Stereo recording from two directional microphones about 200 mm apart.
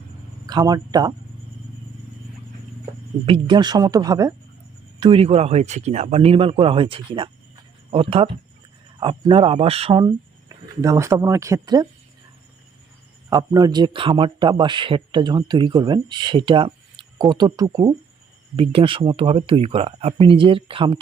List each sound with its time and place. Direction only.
0.4 s speech: 20° right (ahead or behind)
3.2 s speech: 25° right (ahead or behind)
13.3 s speech: 20° right (ahead or behind)